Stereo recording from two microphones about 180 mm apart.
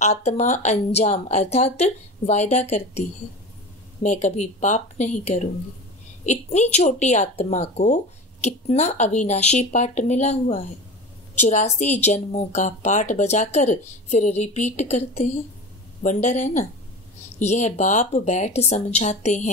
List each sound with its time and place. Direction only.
0.0 s a woman's voice: 40° left (ahead or behind)